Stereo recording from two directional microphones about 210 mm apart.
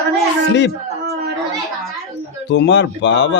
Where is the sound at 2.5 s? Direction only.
55° left (ahead or behind).